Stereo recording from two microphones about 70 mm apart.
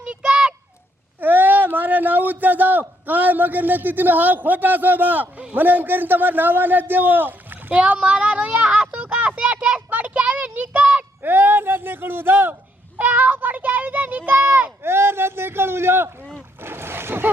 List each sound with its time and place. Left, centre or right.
0.0 s a sound: centre
1.2 s a man's voice: right
14.8 s a man's voice: right